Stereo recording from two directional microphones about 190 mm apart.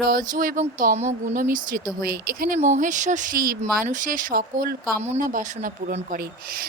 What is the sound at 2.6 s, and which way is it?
A woman's voice, 40° right (ahead or behind).